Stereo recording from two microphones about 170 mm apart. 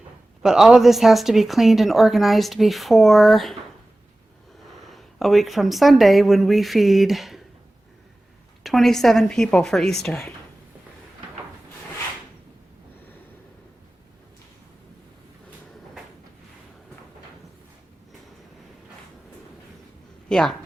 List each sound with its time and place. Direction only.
0.4 s a woman's voice: 5° right (ahead or behind)
4.9 s a woman's voice: centre (ahead or behind)
8.6 s a woman's voice: centre (ahead or behind)
20.2 s a woman's voice: 5° left (ahead or behind)